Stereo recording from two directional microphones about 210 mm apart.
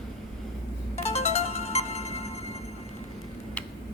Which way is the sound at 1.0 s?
30° left (ahead or behind).